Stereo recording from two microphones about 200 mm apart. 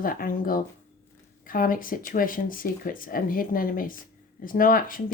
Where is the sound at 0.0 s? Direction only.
45° left (ahead or behind).